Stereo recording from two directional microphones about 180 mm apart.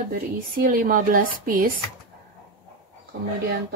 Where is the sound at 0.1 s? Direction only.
55° right (ahead or behind).